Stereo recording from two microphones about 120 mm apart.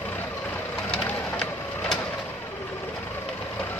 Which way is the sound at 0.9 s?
5° left (ahead or behind).